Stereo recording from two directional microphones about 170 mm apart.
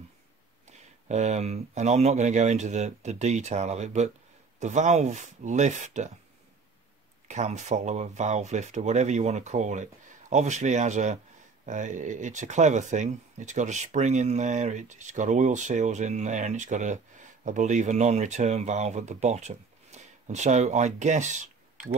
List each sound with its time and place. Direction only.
1.0 s speech: 40° right (ahead or behind)
7.2 s speech: 45° right (ahead or behind)